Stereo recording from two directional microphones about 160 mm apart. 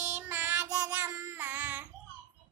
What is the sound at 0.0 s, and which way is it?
Child singing, 10° right (ahead or behind).